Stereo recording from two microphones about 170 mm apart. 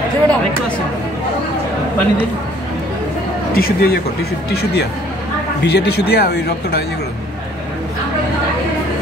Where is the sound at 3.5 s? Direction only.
65° left (ahead or behind).